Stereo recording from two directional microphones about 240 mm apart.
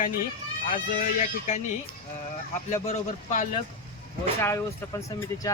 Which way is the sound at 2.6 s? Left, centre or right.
Left.